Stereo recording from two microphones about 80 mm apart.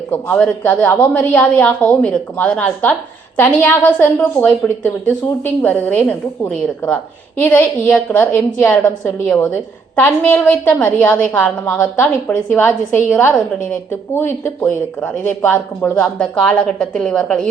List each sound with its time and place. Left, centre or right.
0.1 s a woman's voice: centre
9.5 s a woman's voice: left
14.2 s a woman's voice: left
16.0 s a woman's voice: centre